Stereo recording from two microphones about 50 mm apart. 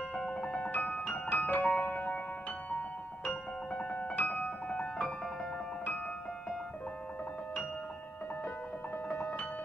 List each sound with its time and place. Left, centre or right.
0.1 s music: left
3.3 s music: left
4.4 s keyboard: left
9.1 s music: left